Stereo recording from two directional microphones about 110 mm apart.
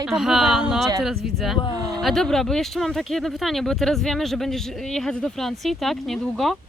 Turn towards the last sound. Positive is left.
turn(degrees=5)  # may be behind; listen again after turning